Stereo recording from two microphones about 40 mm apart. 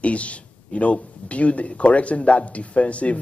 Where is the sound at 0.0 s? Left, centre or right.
Left.